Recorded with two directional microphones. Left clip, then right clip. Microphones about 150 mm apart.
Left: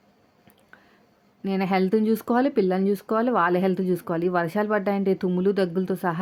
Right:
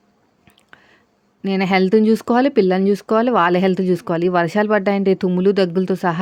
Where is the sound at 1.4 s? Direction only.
40° right (ahead or behind).